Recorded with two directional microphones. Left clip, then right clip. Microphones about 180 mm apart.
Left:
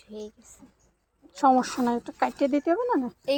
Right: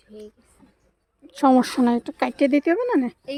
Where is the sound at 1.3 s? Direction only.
55° right (ahead or behind).